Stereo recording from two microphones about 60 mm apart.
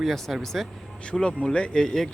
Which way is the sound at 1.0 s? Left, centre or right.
Centre.